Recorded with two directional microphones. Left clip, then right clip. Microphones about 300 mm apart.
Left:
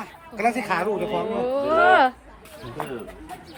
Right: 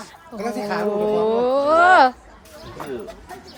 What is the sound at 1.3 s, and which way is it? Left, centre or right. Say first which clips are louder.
Speech: right 4 dB; centre.